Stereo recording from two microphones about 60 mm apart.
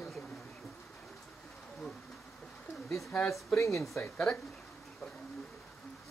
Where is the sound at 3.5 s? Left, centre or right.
Left.